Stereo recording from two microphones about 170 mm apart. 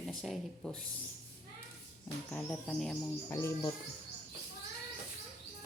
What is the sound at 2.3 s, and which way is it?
Speech, 5° left (ahead or behind).